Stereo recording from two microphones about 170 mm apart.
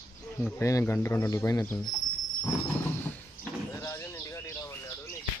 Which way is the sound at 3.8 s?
20° left (ahead or behind).